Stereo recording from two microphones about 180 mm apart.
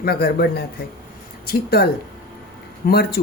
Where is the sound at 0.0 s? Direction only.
60° left (ahead or behind).